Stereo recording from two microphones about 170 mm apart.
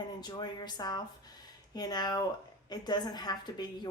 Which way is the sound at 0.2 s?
25° left (ahead or behind).